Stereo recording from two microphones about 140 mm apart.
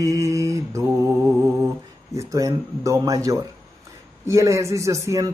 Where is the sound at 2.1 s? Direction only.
25° right (ahead or behind).